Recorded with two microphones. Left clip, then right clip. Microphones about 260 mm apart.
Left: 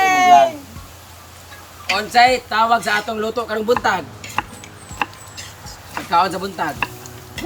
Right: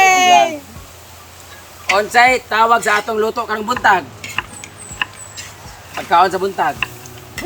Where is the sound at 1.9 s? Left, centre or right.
Centre.